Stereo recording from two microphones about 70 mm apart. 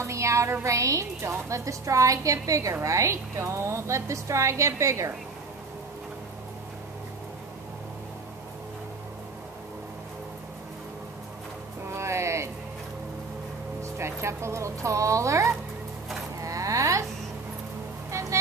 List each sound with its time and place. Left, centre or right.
0.0 s music: right
0.7 s a woman's voice: right
11.9 s music: right
13.9 s music: right
16.3 s a sound: right